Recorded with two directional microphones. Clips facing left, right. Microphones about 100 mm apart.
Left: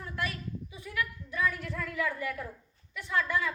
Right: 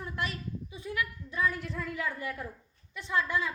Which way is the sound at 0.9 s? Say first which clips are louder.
Even; 20° right (ahead or behind).